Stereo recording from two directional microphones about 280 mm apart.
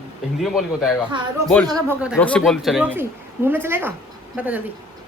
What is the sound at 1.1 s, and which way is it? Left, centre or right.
A woman's voice, centre.